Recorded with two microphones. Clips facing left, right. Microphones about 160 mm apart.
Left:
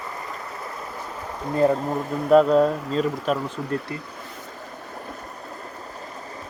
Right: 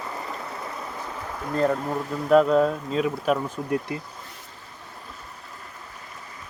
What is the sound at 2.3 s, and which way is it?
Speech, centre (ahead or behind).